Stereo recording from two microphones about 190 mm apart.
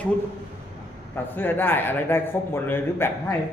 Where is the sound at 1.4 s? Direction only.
10° left (ahead or behind).